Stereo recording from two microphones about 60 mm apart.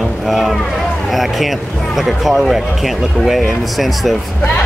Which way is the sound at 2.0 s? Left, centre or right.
Centre.